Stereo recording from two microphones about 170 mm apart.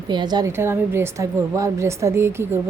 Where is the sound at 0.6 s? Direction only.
15° right (ahead or behind).